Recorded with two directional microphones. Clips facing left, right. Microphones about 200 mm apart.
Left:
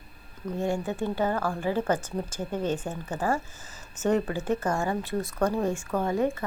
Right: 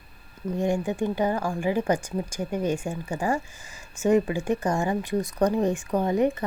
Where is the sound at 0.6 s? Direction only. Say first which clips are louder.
Right 3 dB; 15° right (ahead or behind).